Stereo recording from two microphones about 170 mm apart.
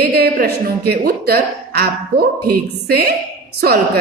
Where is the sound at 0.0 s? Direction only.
70° right (ahead or behind).